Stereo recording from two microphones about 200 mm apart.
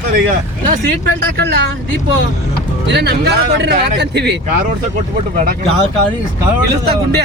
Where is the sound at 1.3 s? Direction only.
55° right (ahead or behind).